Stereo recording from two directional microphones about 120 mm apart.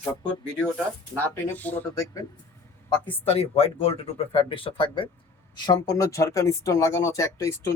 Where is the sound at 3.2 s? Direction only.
55° left (ahead or behind).